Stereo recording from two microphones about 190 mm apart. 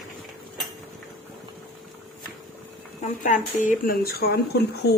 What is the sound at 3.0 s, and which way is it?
Speech, 40° left (ahead or behind).